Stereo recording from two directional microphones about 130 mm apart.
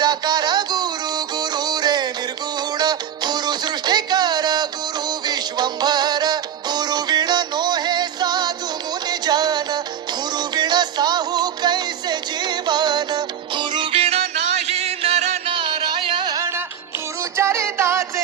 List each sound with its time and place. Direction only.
0.0 s music: 35° right (ahead or behind); by 15.5 s 55° right (ahead or behind)
15.5 s music: 35° right (ahead or behind); by 18.0 s 20° right (ahead or behind)